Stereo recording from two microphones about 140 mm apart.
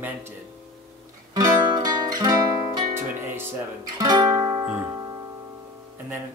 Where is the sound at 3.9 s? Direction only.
30° right (ahead or behind).